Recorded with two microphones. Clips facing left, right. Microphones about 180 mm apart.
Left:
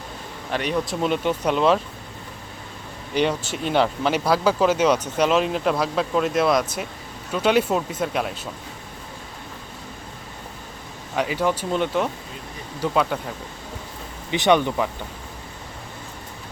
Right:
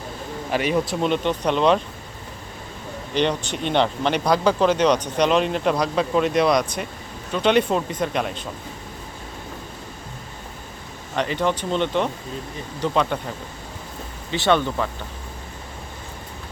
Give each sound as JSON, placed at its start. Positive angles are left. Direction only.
{"t": 0.5, "sound": "speech", "side_deg": -5}
{"t": 3.2, "sound": "speech", "side_deg": 5}
{"t": 11.1, "sound": "speech", "side_deg": 5}
{"t": 14.3, "sound": "speech", "side_deg": 15}